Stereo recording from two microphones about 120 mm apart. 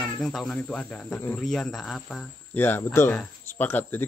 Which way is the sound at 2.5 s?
20° left (ahead or behind).